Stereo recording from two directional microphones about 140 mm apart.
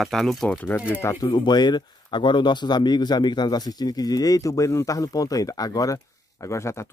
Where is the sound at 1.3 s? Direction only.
30° left (ahead or behind).